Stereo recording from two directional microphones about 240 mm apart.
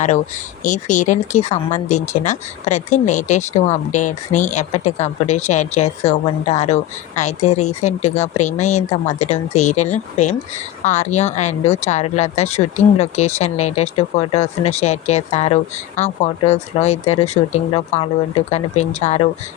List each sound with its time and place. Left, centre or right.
0.6 s speech: left